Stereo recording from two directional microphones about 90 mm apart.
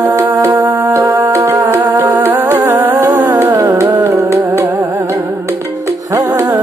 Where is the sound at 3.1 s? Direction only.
40° right (ahead or behind).